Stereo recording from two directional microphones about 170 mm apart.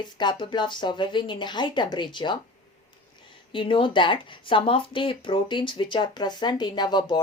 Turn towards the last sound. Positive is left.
turn(degrees=25)  # may be behind; listen again after turning